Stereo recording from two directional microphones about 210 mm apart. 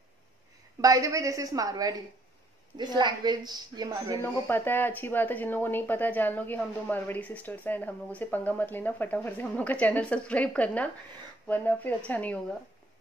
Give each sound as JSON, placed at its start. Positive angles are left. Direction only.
{"t": 0.7, "sound": "a woman's voice", "side_deg": -15}
{"t": 4.2, "sound": "speech", "side_deg": 10}